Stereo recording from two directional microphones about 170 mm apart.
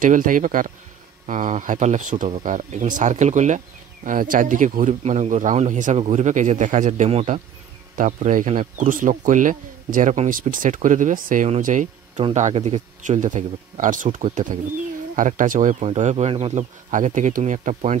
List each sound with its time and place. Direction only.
0.0 s speech: 50° right (ahead or behind)
8.0 s speech: 50° right (ahead or behind)
16.9 s speech: 45° right (ahead or behind)